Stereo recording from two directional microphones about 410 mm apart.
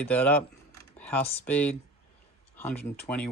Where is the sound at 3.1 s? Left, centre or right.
Centre.